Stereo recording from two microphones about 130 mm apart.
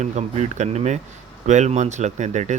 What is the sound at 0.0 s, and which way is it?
Speech, 60° right (ahead or behind).